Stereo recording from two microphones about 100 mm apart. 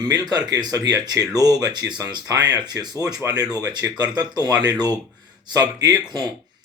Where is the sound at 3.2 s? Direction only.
25° right (ahead or behind).